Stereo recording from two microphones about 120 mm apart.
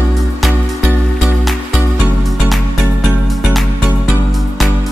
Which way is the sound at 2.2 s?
Centre (ahead or behind).